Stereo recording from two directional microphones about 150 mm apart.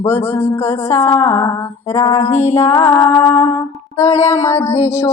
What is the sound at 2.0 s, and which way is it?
Female singing, 45° left (ahead or behind).